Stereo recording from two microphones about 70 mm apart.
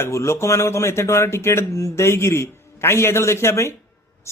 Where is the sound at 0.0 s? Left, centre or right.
Left.